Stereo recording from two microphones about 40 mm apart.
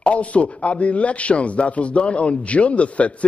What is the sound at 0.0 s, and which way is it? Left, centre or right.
A man's voice, left.